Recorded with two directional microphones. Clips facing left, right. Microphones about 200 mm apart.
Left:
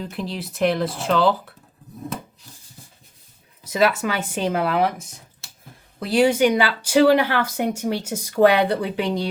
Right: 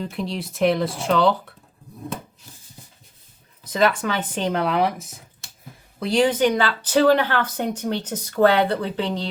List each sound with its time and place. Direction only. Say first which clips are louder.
0.0 s speech: right 1 dB; centre (ahead or behind)
3.6 s speech: left 1 dB; 10° left (ahead or behind)